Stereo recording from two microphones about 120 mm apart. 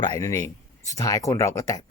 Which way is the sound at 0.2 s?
25° left (ahead or behind).